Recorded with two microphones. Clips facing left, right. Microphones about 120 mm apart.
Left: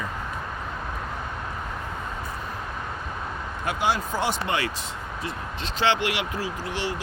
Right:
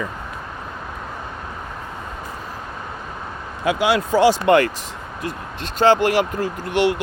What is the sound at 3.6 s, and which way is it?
Speech, 90° right.